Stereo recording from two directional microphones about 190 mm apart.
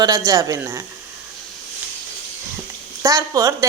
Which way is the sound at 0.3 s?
15° right (ahead or behind).